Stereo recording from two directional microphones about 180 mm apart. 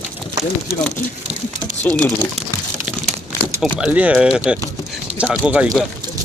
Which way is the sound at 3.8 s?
5° right (ahead or behind).